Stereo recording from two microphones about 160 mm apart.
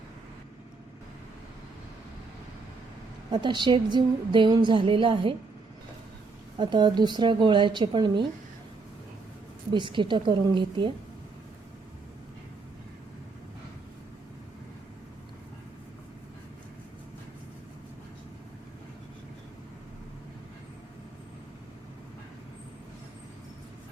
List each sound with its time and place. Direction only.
3.3 s a woman's voice: 30° right (ahead or behind)
6.6 s a woman's voice: 30° right (ahead or behind)
9.7 s a woman's voice: 30° right (ahead or behind)